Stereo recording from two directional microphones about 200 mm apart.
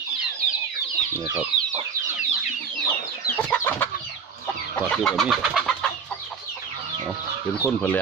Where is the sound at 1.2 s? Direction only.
5° right (ahead or behind).